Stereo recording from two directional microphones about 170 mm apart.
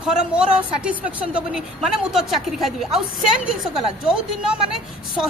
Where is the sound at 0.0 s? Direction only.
5° right (ahead or behind).